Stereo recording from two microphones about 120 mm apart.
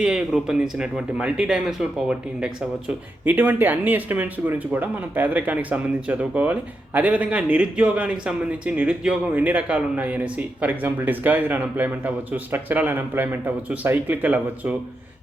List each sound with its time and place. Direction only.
0.0 s speech: 5° right (ahead or behind)